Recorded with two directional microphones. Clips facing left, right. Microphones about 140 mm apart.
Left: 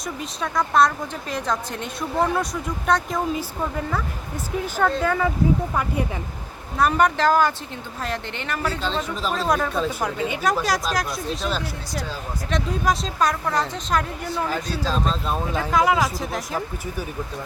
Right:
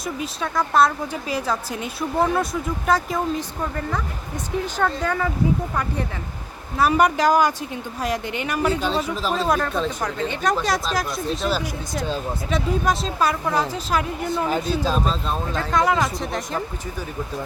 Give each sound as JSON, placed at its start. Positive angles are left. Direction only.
{"t": 0.2, "sound": "a woman's voice", "side_deg": 0}
{"t": 6.7, "sound": "a woman's voice", "side_deg": -5}
{"t": 14.4, "sound": "speech", "side_deg": -20}
{"t": 15.3, "sound": "a woman's voice", "side_deg": 5}